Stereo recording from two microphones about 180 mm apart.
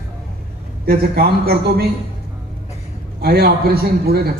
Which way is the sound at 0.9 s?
60° right (ahead or behind).